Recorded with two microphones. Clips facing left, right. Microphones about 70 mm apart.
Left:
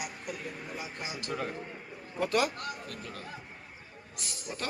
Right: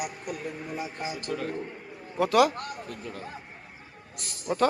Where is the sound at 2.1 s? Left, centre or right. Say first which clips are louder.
Right 6 dB; right.